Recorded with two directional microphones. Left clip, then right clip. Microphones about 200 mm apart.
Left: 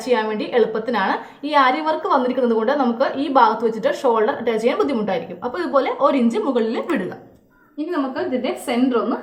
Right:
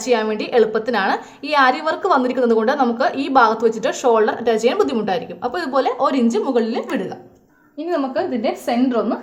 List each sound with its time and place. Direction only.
0.0 s a woman's voice: 30° right (ahead or behind)
7.9 s a woman's voice: 40° right (ahead or behind)